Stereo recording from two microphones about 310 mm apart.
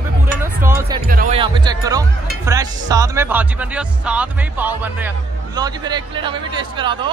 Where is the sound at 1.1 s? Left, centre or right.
Right.